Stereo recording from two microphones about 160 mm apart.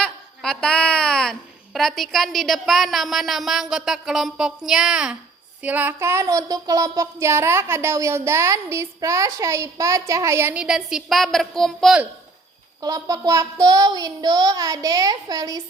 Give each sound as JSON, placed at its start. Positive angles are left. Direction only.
{"t": 0.0, "sound": "speech", "side_deg": 5}
{"t": 5.6, "sound": "child singing", "side_deg": -10}
{"t": 12.8, "sound": "child singing", "side_deg": -25}